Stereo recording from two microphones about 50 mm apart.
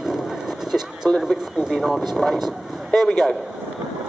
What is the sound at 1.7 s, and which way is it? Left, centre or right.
Speech, centre.